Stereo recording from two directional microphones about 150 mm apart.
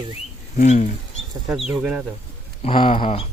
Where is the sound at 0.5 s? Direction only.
50° left (ahead or behind).